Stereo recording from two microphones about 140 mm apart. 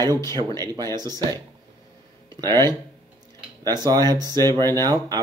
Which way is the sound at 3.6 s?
25° right (ahead or behind).